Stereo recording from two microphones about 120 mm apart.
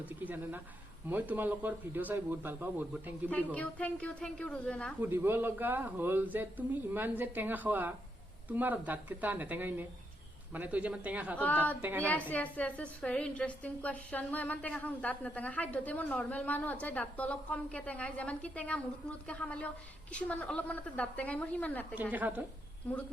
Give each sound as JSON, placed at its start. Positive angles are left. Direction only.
{"t": 0.0, "sound": "speech", "side_deg": -15}
{"t": 3.2, "sound": "a woman's voice", "side_deg": 10}
{"t": 4.9, "sound": "speech", "side_deg": -15}
{"t": 11.3, "sound": "a woman's voice", "side_deg": 15}
{"t": 11.8, "sound": "speech", "side_deg": -15}
{"t": 12.3, "sound": "a woman's voice", "side_deg": 10}
{"t": 22.1, "sound": "speech", "side_deg": -15}